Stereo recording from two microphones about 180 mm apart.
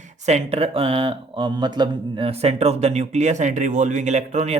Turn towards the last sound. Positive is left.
turn(degrees=-40)  # may be behind; listen again after turning